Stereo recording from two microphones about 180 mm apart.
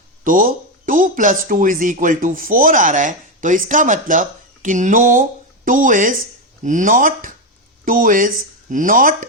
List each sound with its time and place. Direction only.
0.3 s speech: 50° right (ahead or behind)